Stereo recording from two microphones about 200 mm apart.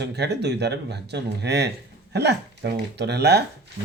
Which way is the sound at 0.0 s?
55° right (ahead or behind).